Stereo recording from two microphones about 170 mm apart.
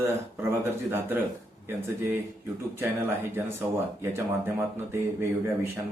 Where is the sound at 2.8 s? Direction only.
15° right (ahead or behind).